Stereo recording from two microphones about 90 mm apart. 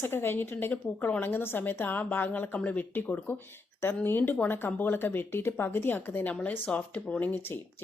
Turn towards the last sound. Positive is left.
turn(degrees=20)  # may be behind; listen again after turning